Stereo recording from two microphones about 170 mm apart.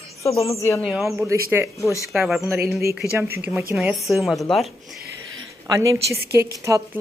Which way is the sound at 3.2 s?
10° right (ahead or behind).